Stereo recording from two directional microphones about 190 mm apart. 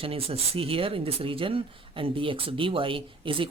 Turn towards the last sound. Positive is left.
turn(degrees=-25)  # may be behind; listen again after turning